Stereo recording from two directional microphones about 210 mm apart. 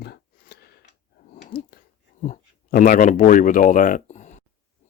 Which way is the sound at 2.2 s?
35° left (ahead or behind).